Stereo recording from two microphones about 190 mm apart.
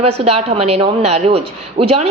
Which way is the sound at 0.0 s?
30° right (ahead or behind).